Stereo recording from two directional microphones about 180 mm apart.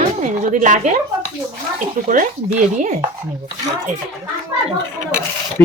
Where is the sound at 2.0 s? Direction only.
45° right (ahead or behind).